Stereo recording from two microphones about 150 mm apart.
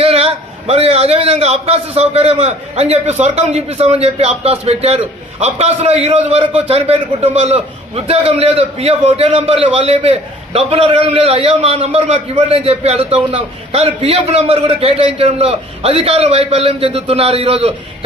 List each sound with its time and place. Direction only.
0.0 s a man's voice: 40° right (ahead or behind)